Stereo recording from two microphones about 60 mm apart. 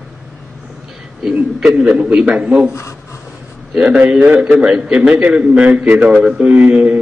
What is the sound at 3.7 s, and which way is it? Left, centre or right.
A man's voice, right.